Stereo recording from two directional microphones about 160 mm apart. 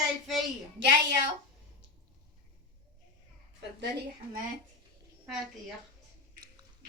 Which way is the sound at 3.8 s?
90° right.